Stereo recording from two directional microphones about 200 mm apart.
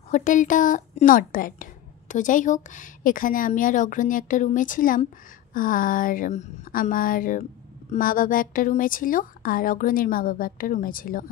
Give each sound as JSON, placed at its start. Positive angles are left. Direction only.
{"t": 0.1, "sound": "a woman's voice", "side_deg": 40}